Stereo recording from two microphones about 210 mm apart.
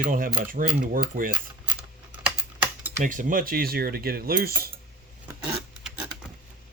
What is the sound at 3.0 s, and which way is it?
Cutlery, 40° right (ahead or behind).